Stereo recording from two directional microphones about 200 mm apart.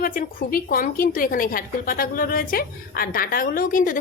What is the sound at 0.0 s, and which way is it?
A woman's voice, 45° left (ahead or behind).